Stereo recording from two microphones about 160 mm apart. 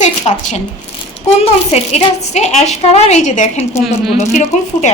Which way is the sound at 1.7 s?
45° left (ahead or behind).